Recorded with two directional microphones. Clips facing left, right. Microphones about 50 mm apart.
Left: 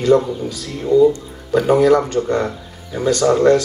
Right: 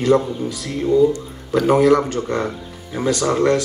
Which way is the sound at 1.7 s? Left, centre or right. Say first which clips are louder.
Left 1 dB; right.